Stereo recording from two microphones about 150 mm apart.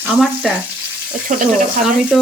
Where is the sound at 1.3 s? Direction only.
65° right (ahead or behind).